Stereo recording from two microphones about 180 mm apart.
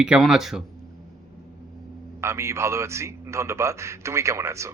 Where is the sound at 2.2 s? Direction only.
15° right (ahead or behind).